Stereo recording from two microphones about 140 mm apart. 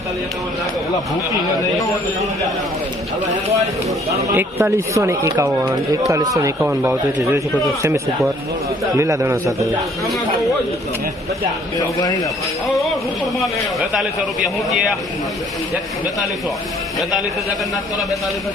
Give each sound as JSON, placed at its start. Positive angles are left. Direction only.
{"t": 4.4, "sound": "speech", "side_deg": -15}
{"t": 6.6, "sound": "speech", "side_deg": -10}
{"t": 11.8, "sound": "a man's voice", "side_deg": 25}
{"t": 14.4, "sound": "speech", "side_deg": 0}
{"t": 17.0, "sound": "speech", "side_deg": 0}